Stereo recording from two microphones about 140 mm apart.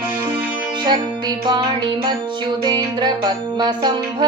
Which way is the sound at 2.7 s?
30° right (ahead or behind).